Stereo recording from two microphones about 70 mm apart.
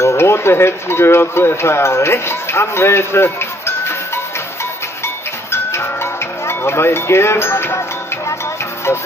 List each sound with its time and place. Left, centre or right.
0.0 s speech: left
5.0 s music: left
6.4 s speech: left